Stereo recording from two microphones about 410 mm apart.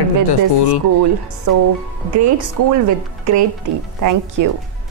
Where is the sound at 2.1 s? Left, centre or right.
Right.